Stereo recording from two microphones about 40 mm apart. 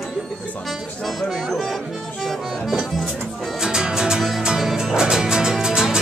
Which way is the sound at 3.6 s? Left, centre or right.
Centre.